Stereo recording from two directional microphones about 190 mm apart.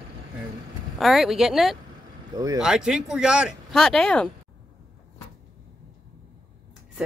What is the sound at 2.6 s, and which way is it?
Speech, centre (ahead or behind).